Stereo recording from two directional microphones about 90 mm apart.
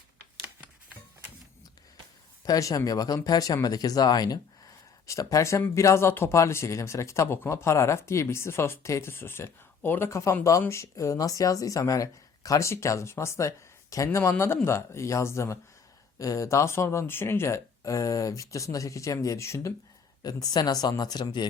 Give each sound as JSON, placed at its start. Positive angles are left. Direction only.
{"t": 2.4, "sound": "speech", "side_deg": 40}
{"t": 5.0, "sound": "speech", "side_deg": 35}
{"t": 20.2, "sound": "speech", "side_deg": 50}